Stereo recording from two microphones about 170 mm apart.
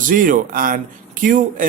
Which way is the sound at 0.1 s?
55° right (ahead or behind).